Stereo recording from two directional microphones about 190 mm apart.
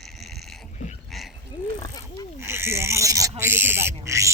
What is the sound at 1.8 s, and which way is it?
Wild animals, 20° left (ahead or behind).